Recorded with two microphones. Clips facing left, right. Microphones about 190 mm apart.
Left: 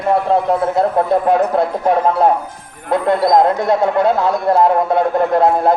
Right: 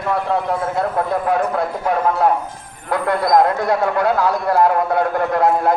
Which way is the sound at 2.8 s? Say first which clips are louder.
Left 4 dB; 25° left (ahead or behind).